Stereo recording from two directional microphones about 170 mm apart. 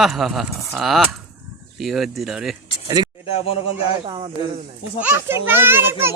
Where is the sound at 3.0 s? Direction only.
25° right (ahead or behind).